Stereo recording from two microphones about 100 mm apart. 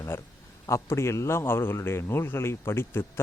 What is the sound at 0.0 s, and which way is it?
A man's voice, 30° left (ahead or behind).